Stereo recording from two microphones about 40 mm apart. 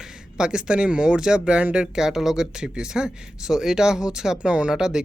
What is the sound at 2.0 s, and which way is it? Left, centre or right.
Speech, centre.